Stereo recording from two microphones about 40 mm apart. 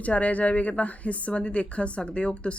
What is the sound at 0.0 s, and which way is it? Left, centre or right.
Speech, left.